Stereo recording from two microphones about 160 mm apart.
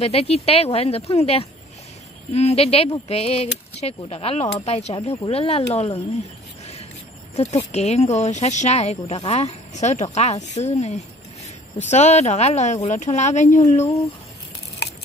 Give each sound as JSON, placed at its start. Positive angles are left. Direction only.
{"t": 0.0, "sound": "speech", "side_deg": 40}
{"t": 6.6, "sound": "a sound", "side_deg": 40}
{"t": 7.3, "sound": "speech", "side_deg": 45}
{"t": 13.8, "sound": "speech", "side_deg": 20}